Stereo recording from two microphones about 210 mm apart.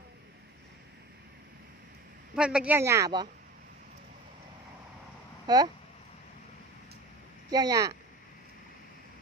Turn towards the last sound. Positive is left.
turn(degrees=-15)  # may be behind; listen again after turning